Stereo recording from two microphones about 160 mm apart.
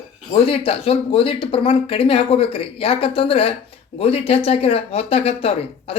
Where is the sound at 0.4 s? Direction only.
35° left (ahead or behind).